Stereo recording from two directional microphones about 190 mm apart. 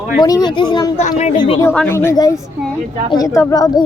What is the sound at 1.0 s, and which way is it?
Speech, 35° left (ahead or behind).